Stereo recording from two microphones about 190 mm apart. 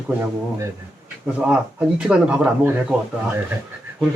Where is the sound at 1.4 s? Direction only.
5° right (ahead or behind).